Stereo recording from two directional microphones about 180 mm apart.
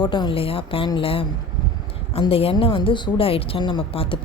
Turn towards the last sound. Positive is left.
turn(degrees=30)  # may be behind; listen again after turning